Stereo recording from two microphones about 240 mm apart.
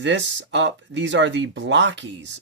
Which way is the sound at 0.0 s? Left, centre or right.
Right.